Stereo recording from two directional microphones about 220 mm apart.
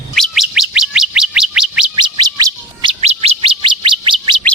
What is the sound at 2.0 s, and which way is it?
Bird, 20° right (ahead or behind).